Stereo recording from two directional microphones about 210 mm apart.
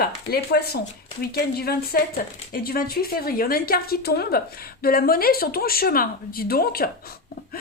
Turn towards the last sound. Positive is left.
turn(degrees=45)  # may be behind; listen again after turning